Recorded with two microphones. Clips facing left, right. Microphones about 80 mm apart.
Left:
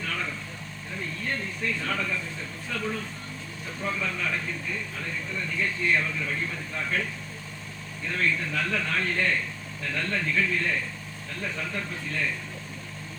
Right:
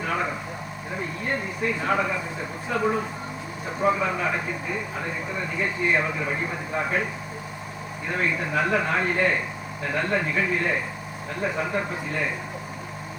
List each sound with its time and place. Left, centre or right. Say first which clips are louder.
0.0 s vehicle: right 6 dB; right
0.9 s speech: right 4 dB; right